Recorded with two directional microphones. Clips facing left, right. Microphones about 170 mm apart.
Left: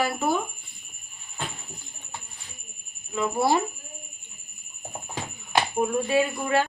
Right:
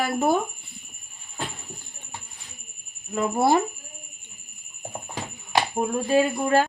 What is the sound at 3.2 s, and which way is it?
Speech, 50° right (ahead or behind).